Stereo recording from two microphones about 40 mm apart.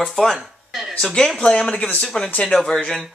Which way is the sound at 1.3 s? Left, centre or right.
Left.